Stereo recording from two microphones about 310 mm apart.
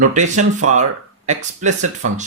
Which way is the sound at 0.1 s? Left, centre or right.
Right.